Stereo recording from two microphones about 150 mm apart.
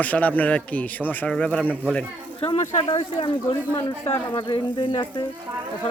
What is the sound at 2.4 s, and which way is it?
Speech, 45° left (ahead or behind).